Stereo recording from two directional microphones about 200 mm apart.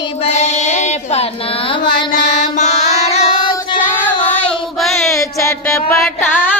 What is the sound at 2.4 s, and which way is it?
Music, 35° left (ahead or behind).